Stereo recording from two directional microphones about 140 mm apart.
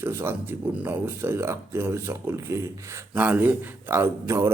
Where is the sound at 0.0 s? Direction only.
15° right (ahead or behind).